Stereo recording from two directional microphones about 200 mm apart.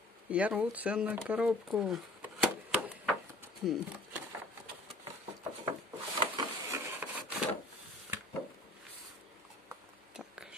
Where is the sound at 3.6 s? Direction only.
Centre (ahead or behind).